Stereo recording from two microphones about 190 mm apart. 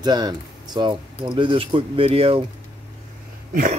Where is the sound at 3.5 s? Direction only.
45° right (ahead or behind).